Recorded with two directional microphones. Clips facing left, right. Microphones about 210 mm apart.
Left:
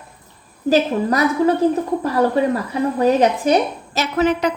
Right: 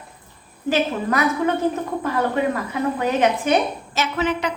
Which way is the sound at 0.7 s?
35° left (ahead or behind).